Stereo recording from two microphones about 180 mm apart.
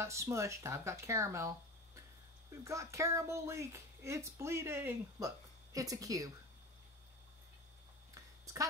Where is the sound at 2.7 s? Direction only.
15° right (ahead or behind).